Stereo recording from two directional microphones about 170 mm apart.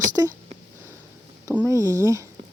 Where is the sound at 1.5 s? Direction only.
15° right (ahead or behind).